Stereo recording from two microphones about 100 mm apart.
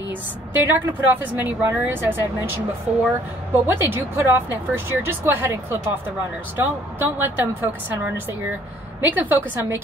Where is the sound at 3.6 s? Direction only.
20° right (ahead or behind).